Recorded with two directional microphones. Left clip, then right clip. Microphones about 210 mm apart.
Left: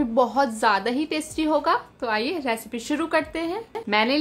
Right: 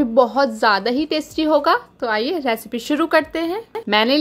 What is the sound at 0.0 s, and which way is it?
A woman's voice, 20° right (ahead or behind).